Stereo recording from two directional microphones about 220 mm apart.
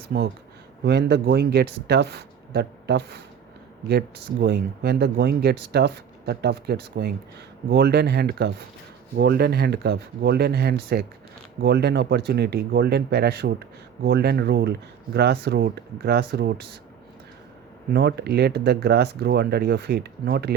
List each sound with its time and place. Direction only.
0.1 s speech: 45° right (ahead or behind)
17.9 s speech: 50° right (ahead or behind)